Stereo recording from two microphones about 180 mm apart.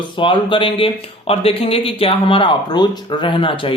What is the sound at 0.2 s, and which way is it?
A man's voice, 30° left (ahead or behind).